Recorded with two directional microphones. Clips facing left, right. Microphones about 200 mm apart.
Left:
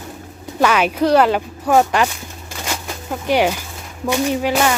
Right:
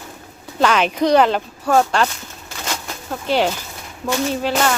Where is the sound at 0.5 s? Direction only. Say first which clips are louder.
Left 1 dB; 10° left (ahead or behind).